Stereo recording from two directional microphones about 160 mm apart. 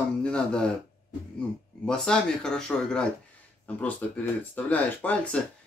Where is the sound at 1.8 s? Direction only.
5° left (ahead or behind).